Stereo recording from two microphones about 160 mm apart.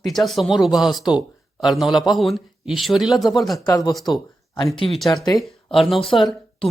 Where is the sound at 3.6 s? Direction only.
25° left (ahead or behind).